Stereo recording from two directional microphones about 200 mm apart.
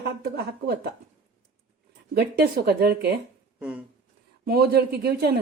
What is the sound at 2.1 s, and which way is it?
Speech, 55° right (ahead or behind).